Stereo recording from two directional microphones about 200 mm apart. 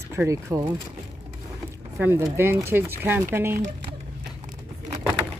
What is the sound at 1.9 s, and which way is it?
Speech, 10° right (ahead or behind).